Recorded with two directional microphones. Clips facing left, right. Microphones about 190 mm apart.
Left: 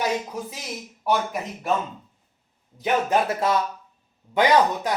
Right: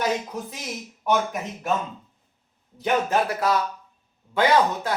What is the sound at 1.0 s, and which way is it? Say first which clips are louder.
Speech: right 1 dB; 5° left (ahead or behind).